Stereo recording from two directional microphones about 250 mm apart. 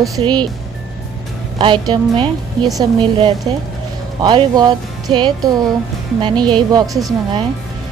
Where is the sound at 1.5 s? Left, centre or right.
Centre.